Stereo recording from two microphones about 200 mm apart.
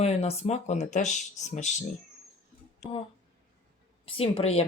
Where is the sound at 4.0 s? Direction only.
30° left (ahead or behind).